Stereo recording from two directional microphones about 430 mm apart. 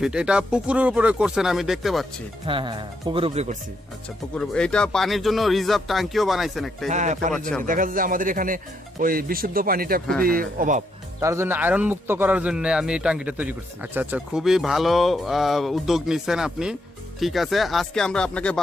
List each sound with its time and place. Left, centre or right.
0.0 s a man's voice: centre
2.5 s speech: centre
4.4 s a man's voice: centre
6.8 s speech: centre
11.2 s a man's voice: centre